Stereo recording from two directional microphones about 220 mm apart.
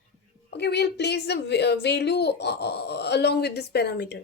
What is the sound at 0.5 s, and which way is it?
A woman's voice, 50° left (ahead or behind).